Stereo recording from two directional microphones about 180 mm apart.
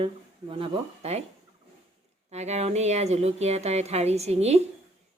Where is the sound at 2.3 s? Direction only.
40° right (ahead or behind).